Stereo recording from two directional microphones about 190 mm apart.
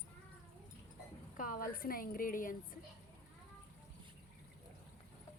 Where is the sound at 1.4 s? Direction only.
45° left (ahead or behind).